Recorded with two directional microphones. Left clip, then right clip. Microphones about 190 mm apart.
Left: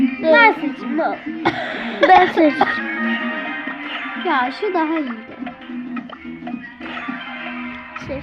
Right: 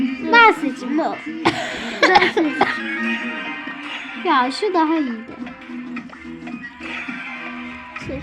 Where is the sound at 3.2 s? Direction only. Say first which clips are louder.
Left 3 dB; 35° left (ahead or behind).